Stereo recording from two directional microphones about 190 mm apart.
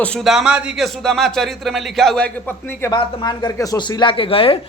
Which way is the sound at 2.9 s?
25° left (ahead or behind).